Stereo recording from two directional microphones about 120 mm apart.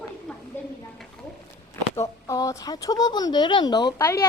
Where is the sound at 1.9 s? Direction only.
30° left (ahead or behind).